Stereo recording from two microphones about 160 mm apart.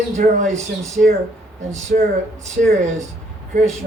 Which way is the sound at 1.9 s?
65° right (ahead or behind).